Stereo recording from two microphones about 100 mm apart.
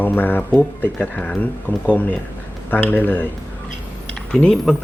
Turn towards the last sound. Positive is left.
turn(degrees=0)  # may be behind; listen again after turning